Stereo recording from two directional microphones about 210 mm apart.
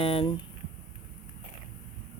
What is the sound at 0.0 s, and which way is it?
Speech, 25° left (ahead or behind).